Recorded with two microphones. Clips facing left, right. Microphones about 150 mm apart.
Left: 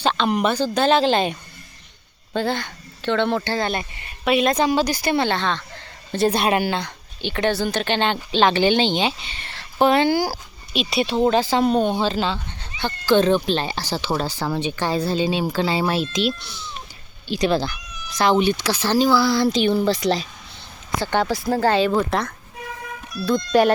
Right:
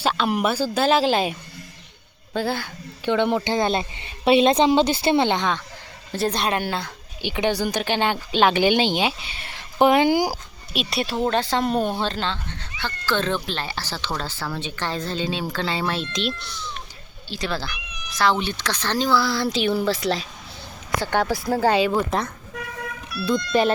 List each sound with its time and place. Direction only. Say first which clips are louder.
0.0 s speech: left 2 dB; 5° right (ahead or behind)
6.1 s speech: left 4 dB; centre (ahead or behind); by 10.3 s 15° right (ahead or behind)
10.7 s speech: left 4 dB; centre (ahead or behind)